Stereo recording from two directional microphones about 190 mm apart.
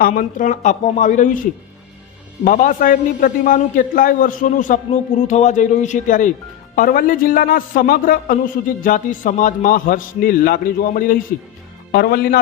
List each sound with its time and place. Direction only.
0.0 s a man's voice: 45° left (ahead or behind)
11.9 s speech: 55° left (ahead or behind)